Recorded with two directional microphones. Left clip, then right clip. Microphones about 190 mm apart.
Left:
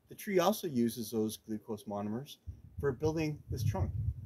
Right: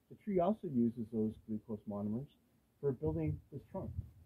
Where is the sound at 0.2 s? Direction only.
20° left (ahead or behind).